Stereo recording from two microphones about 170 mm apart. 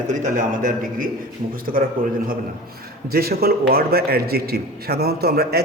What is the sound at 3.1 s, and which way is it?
A man's voice, 65° right (ahead or behind).